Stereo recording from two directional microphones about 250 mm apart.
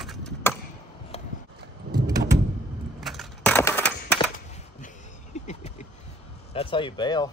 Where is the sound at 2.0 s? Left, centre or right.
Centre.